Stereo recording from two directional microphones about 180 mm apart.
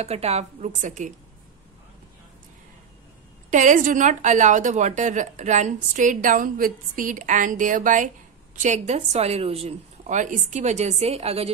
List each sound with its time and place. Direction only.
0.0 s a woman's voice: 35° right (ahead or behind)
3.4 s a woman's voice: 45° right (ahead or behind)